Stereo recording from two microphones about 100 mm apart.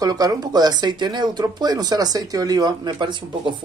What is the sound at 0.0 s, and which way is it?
Speech, 40° right (ahead or behind).